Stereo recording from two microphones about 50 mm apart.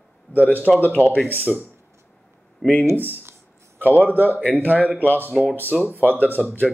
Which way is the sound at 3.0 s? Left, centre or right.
Right.